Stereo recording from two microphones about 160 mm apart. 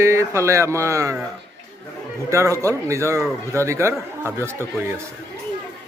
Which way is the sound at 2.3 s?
20° right (ahead or behind).